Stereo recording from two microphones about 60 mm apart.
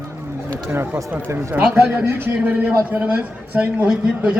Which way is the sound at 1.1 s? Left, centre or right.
Right.